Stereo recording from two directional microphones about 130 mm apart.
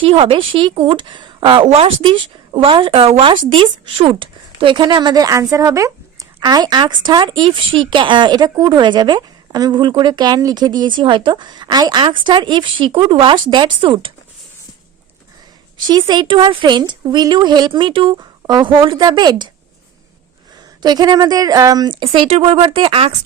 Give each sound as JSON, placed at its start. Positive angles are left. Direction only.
{"t": 0.0, "sound": "a woman's voice", "side_deg": -45}
{"t": 15.9, "sound": "speech", "side_deg": -35}
{"t": 20.8, "sound": "speech", "side_deg": -30}
{"t": 22.0, "sound": "a woman's voice", "side_deg": -45}